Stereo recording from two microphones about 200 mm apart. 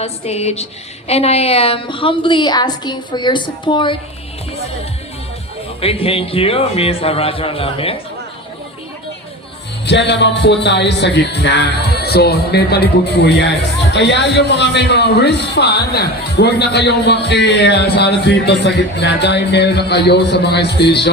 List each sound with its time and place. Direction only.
0.0 s a woman's voice: 30° left (ahead or behind)
5.8 s a woman's voice: 30° left (ahead or behind)
9.8 s music: 60° left (ahead or behind)